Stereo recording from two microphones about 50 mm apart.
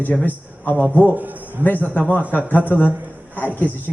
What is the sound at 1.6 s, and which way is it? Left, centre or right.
A man's voice, left.